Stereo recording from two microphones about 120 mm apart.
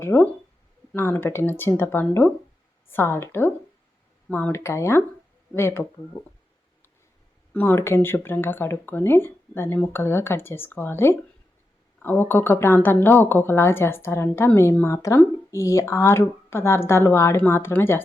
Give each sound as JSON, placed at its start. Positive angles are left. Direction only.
{"t": 0.0, "sound": "speech", "side_deg": 15}
{"t": 6.1, "sound": "speech", "side_deg": 35}
{"t": 7.5, "sound": "speech", "side_deg": 15}